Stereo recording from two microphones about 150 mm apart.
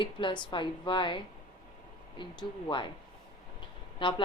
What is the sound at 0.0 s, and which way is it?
A woman's voice, 35° left (ahead or behind).